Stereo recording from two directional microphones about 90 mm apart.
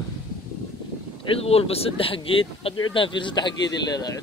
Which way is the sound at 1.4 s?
90° left.